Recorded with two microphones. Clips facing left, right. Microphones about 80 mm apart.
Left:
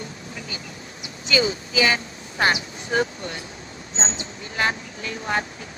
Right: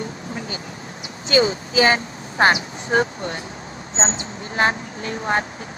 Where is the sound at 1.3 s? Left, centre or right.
Right.